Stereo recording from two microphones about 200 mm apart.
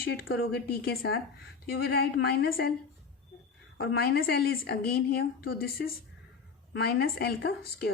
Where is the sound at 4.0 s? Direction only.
50° left (ahead or behind).